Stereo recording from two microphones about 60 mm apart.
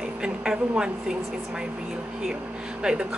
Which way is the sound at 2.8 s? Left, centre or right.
Centre.